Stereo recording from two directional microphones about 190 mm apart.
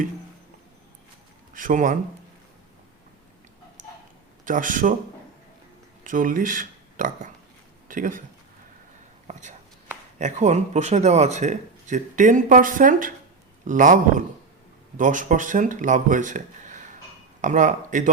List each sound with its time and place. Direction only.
1.5 s a man's voice: 45° right (ahead or behind)
4.4 s a man's voice: 45° right (ahead or behind)
6.1 s speech: 45° right (ahead or behind)
9.2 s whispering: 40° right (ahead or behind)
10.2 s a man's voice: 40° right (ahead or behind)